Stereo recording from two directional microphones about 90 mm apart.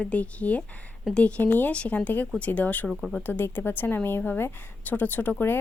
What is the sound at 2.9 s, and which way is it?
Speech, 5° left (ahead or behind).